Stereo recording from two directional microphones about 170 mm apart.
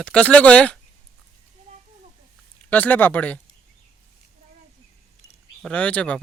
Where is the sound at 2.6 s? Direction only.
10° left (ahead or behind).